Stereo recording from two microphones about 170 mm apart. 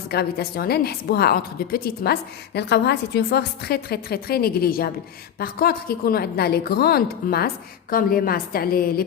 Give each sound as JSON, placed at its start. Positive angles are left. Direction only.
{"t": 0.1, "sound": "a woman's voice", "side_deg": 65}